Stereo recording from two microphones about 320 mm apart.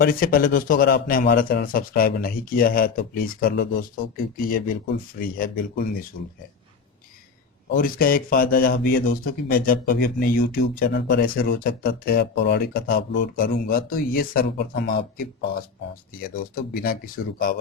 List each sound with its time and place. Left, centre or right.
0.0 s a man's voice: left
7.7 s a man's voice: left